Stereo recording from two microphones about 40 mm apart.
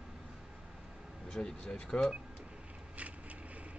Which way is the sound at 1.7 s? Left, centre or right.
Left.